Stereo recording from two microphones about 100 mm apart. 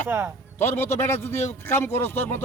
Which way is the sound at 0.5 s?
25° left (ahead or behind).